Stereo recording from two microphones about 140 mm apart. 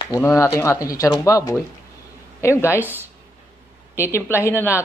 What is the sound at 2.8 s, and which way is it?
Speech, 15° right (ahead or behind).